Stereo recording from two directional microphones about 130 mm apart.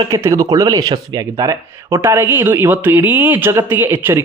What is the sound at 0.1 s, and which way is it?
A man's voice, 25° right (ahead or behind).